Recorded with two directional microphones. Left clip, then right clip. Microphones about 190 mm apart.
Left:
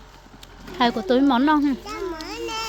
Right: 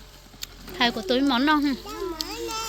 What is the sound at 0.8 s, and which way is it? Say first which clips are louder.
Speech: left 3 dB; 20° left (ahead or behind).